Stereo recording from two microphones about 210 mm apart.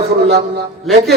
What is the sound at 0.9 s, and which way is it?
Speech, centre (ahead or behind).